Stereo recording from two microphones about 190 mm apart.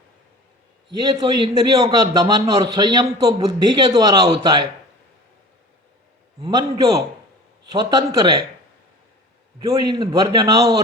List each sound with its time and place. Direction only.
1.2 s a man's voice: 20° right (ahead or behind)
6.4 s a man's voice: 20° right (ahead or behind)
9.6 s a man's voice: 20° right (ahead or behind)